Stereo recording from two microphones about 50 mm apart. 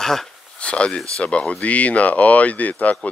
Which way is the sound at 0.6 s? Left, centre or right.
Left.